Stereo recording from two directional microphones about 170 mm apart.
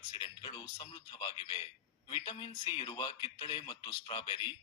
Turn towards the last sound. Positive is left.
turn(degrees=30)  # may be behind; listen again after turning